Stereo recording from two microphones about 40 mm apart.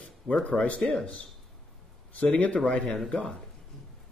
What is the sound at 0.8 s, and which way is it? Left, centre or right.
Speech, centre.